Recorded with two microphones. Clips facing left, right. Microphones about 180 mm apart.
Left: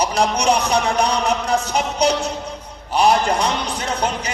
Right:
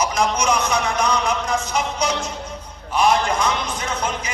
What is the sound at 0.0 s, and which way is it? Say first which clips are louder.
Speech: left 2 dB; 35° left (ahead or behind).